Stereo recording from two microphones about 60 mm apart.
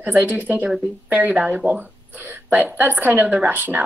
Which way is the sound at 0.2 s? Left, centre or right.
Right.